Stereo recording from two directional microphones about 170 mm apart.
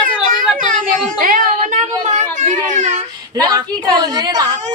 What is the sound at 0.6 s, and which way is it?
Speech, 55° right (ahead or behind).